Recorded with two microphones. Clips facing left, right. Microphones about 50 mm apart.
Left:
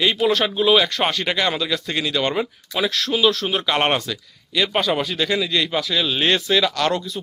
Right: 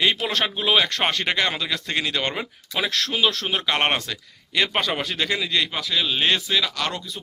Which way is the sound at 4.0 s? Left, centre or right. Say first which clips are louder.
Left 3 dB; right.